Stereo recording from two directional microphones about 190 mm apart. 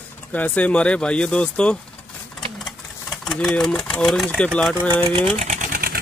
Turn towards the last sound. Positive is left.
turn(degrees=-50)  # may be behind; listen again after turning